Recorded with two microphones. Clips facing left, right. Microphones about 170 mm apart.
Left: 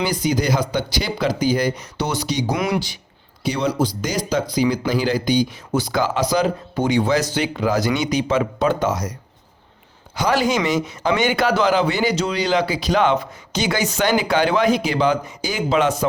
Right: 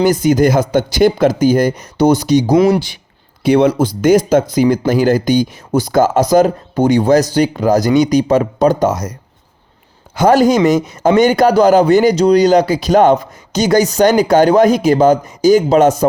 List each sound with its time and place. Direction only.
0.0 s speech: 50° right (ahead or behind)
10.2 s speech: 45° right (ahead or behind)